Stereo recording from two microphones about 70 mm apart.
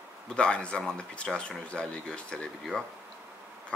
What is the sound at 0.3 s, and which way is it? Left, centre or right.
Speech, centre.